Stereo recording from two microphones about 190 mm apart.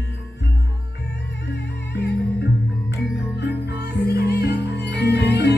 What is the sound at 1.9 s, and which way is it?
Music, 60° left (ahead or behind).